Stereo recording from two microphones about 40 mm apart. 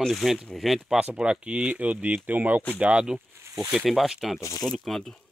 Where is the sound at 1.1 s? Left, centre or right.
Right.